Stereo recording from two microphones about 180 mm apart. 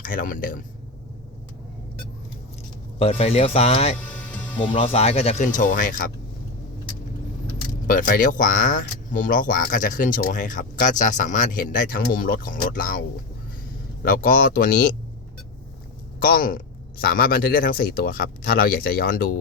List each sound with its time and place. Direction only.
0.0 s speech: 50° left (ahead or behind)
3.0 s speech: 35° left (ahead or behind)
4.0 s music: 10° left (ahead or behind)
4.7 s speech: 30° left (ahead or behind); by 6.1 s 50° left (ahead or behind)
7.9 s speech: 50° left (ahead or behind)
14.3 s speech: 55° left (ahead or behind)
16.2 s speech: 50° left (ahead or behind)